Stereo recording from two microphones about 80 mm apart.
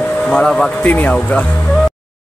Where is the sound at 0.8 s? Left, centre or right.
Left.